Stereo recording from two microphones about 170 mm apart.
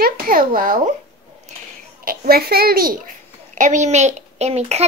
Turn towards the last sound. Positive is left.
turn(degrees=-40)  # may be behind; listen again after turning